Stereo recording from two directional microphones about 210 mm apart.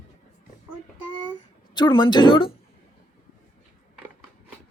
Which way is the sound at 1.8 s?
20° left (ahead or behind).